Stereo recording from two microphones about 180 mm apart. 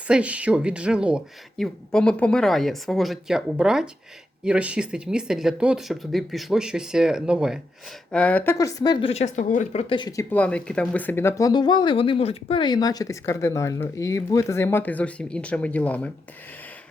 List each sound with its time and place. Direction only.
0.1 s speech: 5° right (ahead or behind)
8.1 s speech: 5° left (ahead or behind)
8.5 s a woman's voice: 20° left (ahead or behind); by 9.8 s 40° left (ahead or behind)
9.9 s speech: 20° left (ahead or behind)
10.3 s speech: 5° left (ahead or behind)